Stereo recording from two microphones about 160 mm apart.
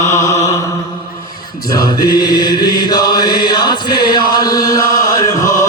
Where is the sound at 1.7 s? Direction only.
25° left (ahead or behind).